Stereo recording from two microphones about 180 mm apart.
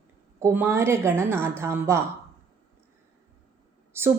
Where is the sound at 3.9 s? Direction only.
15° right (ahead or behind).